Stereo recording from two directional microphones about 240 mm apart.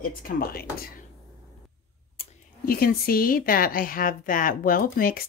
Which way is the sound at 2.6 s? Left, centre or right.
Left.